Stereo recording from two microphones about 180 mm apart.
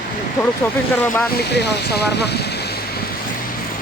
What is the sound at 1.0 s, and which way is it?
Speech, 10° left (ahead or behind).